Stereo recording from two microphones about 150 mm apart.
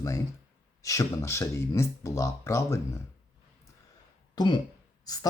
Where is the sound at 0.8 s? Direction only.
20° left (ahead or behind).